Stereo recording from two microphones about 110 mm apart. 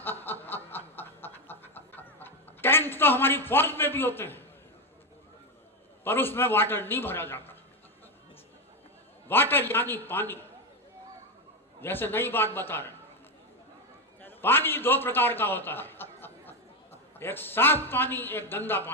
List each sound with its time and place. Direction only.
0.0 s snicker: 20° left (ahead or behind)
6.1 s a man's voice: 20° left (ahead or behind)
9.2 s a man's voice: 20° left (ahead or behind)
11.8 s a man's voice: 20° left (ahead or behind)
14.2 s a man's voice: 20° left (ahead or behind)